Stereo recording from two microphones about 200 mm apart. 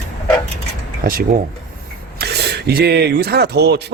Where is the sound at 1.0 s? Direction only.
45° right (ahead or behind).